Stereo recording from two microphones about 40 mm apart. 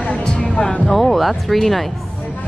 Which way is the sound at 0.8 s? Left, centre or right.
Centre.